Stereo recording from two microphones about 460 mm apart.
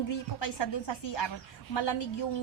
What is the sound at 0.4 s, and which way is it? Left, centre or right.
A woman's voice, left.